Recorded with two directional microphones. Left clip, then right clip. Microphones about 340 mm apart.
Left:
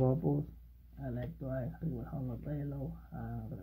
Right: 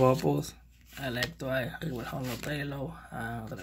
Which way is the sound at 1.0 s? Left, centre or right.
Centre.